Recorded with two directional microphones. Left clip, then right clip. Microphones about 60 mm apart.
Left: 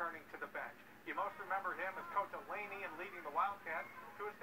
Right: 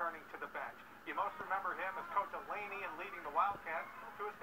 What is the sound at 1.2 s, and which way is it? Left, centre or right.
Radio, left.